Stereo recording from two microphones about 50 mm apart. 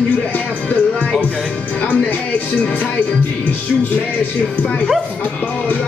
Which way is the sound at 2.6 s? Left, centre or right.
Left.